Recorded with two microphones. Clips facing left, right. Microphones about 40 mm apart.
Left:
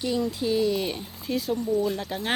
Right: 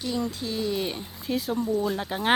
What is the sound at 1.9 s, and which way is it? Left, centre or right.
Speech, centre.